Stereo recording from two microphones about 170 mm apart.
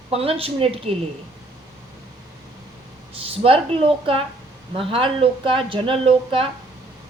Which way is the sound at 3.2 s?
35° right (ahead or behind).